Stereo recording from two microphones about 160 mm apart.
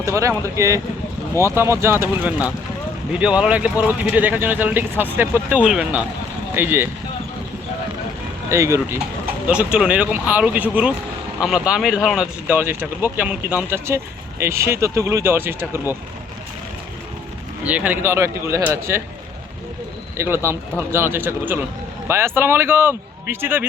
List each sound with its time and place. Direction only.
0.0 s speech: 20° right (ahead or behind)
8.4 s speech: 20° right (ahead or behind)
9.5 s speech: 5° right (ahead or behind)
17.6 s speech: 10° right (ahead or behind)
20.1 s speech: 15° right (ahead or behind)